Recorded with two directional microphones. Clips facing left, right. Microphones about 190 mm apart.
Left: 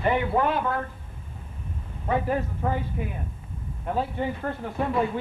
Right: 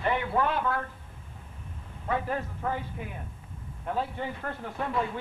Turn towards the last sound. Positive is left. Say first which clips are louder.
# left 5 dB
turn(degrees=15)  # may be behind; listen again after turning